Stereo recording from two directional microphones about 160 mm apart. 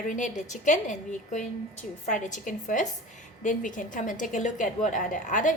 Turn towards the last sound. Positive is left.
turn(degrees=55)  # may be behind; listen again after turning